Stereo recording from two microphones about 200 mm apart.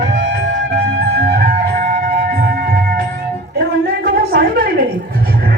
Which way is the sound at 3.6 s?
50° right (ahead or behind).